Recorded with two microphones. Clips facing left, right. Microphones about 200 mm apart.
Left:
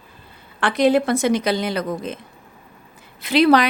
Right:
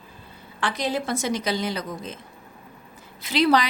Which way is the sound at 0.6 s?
60° left (ahead or behind).